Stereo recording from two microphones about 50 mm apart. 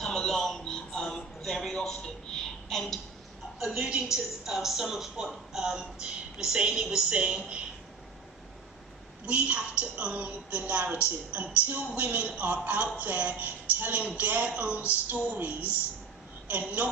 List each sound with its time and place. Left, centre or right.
0.0 s music: centre
1.7 s a sound: centre
3.8 s a woman's voice: centre
9.2 s a woman's voice: right